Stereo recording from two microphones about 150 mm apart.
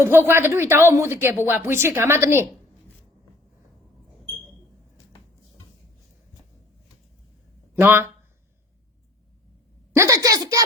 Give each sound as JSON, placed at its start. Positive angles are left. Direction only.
{"t": 0.0, "sound": "a woman's voice", "side_deg": -15}
{"t": 7.8, "sound": "a woman's voice", "side_deg": -15}
{"t": 9.9, "sound": "a woman's voice", "side_deg": -20}